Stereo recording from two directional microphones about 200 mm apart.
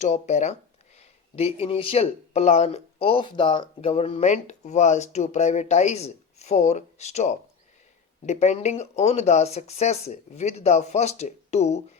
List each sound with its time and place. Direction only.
0.0 s speech: 35° left (ahead or behind)